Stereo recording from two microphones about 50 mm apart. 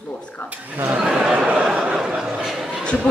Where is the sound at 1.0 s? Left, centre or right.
Centre.